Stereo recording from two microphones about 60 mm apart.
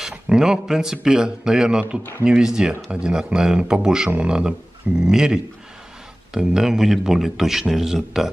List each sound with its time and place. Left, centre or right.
0.3 s a man's voice: centre